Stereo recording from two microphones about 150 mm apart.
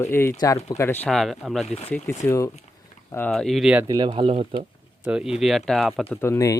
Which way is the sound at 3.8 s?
30° right (ahead or behind).